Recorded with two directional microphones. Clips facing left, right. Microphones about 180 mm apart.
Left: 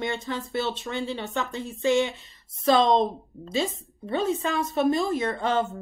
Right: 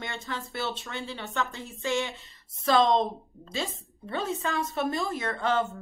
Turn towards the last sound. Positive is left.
turn(degrees=20)  # may be behind; listen again after turning